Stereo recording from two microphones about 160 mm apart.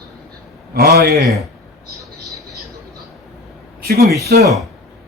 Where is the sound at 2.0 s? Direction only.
20° right (ahead or behind).